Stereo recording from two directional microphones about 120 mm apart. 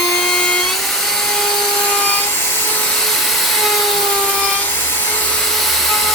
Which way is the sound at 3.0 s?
Centre (ahead or behind).